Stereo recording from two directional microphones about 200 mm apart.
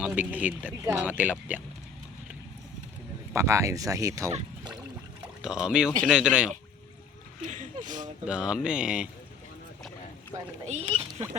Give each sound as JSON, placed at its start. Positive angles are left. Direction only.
{"t": 0.0, "sound": "speech", "side_deg": -10}
{"t": 3.3, "sound": "speech", "side_deg": -15}
{"t": 4.3, "sound": "speech", "side_deg": -30}
{"t": 5.4, "sound": "speech", "side_deg": -5}
{"t": 7.4, "sound": "a sound", "side_deg": -35}
{"t": 7.9, "sound": "speech", "side_deg": -40}
{"t": 8.2, "sound": "speech", "side_deg": -5}
{"t": 10.7, "sound": "speech", "side_deg": -30}